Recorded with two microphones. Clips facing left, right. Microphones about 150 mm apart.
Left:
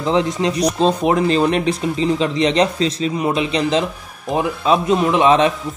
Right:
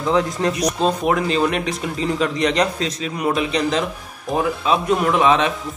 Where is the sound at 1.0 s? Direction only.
30° left (ahead or behind).